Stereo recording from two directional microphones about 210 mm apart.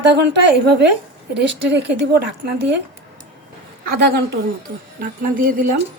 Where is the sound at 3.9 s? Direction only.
50° right (ahead or behind).